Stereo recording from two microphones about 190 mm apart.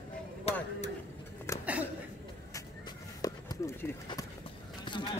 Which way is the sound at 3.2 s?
20° left (ahead or behind).